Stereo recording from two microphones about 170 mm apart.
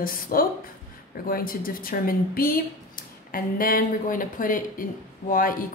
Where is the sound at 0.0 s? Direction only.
60° left (ahead or behind).